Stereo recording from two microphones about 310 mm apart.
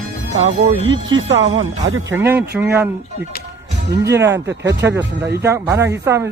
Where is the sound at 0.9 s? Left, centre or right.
Right.